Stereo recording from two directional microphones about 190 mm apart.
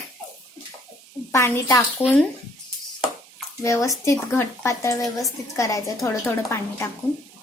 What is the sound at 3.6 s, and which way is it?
Speech, 15° left (ahead or behind).